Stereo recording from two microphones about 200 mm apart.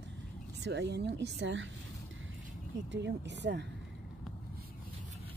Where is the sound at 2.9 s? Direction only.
60° right (ahead or behind).